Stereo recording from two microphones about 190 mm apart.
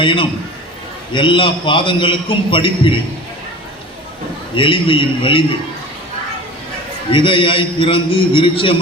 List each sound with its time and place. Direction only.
0.0 s a man's voice: 25° left (ahead or behind)
4.5 s a man's voice: 25° left (ahead or behind)
7.1 s a man's voice: 25° left (ahead or behind)